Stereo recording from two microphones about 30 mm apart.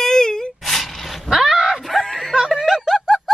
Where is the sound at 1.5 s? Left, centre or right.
Right.